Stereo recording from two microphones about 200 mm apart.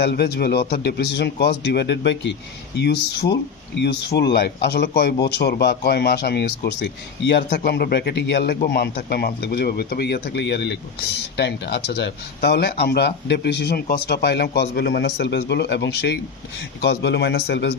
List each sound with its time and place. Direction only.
0.0 s speech: 55° left (ahead or behind)